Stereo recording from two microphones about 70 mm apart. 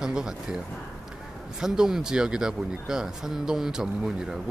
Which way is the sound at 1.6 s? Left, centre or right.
Centre.